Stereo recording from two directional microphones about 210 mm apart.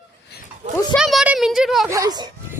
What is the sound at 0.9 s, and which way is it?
Speech, centre (ahead or behind).